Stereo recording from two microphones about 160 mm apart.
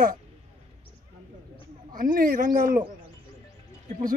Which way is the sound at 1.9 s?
60° right (ahead or behind).